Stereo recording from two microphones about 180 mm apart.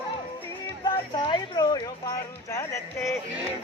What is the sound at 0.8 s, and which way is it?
Music, 25° left (ahead or behind).